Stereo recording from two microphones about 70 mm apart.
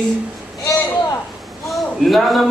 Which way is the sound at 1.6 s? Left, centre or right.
Centre.